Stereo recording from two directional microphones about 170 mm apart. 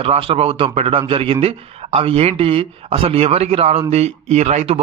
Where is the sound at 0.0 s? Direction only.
35° right (ahead or behind).